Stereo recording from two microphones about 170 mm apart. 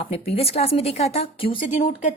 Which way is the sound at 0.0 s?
35° left (ahead or behind).